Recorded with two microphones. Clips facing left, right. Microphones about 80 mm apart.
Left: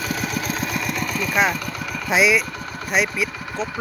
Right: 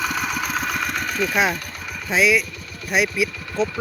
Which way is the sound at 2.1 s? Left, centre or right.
Centre.